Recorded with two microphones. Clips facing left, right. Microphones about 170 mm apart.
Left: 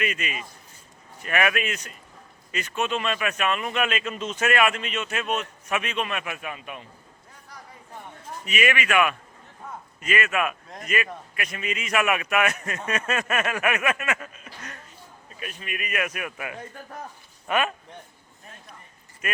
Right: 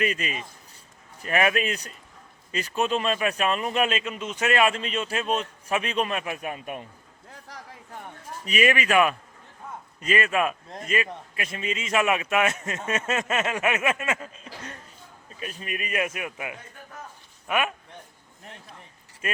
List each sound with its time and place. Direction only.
0.0 s a man's voice: 35° right (ahead or behind)
4.0 s speech: 15° right (ahead or behind)
4.5 s a man's voice: 30° right (ahead or behind); by 6.8 s 45° right (ahead or behind)
7.4 s a sound: 90° right
8.4 s a man's voice: 35° right (ahead or behind); by 17.7 s 10° right (ahead or behind)
19.2 s a man's voice: 30° right (ahead or behind)